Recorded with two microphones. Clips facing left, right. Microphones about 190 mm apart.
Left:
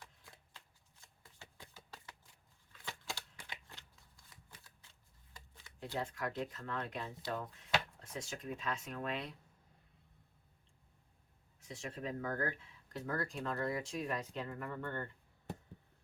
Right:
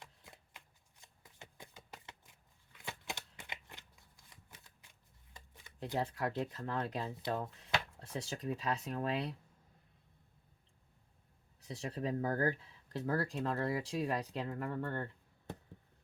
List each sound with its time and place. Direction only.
0.0 s shuffling cards: 25° right (ahead or behind)
1.0 s a sound: 20° right (ahead or behind)
2.8 s shuffling cards: 20° right (ahead or behind)
6.0 s speech: 35° right (ahead or behind)
11.6 s speech: 35° right (ahead or behind)